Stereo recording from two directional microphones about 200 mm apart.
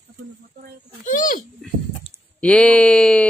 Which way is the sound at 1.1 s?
40° left (ahead or behind).